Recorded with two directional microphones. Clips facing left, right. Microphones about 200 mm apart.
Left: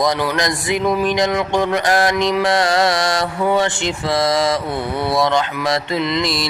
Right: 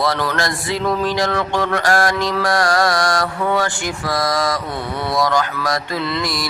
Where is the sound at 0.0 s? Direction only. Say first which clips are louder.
Left 2 dB; 15° left (ahead or behind).